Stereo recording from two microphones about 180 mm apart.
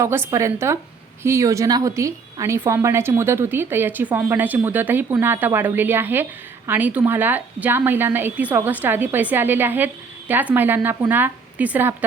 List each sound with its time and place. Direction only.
0.0 s a woman's voice: 15° right (ahead or behind)